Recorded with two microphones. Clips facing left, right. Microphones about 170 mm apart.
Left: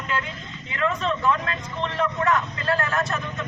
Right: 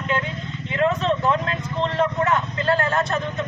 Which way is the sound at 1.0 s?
30° right (ahead or behind).